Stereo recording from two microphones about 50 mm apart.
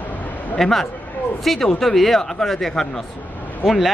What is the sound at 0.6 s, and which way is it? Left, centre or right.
Speech, centre.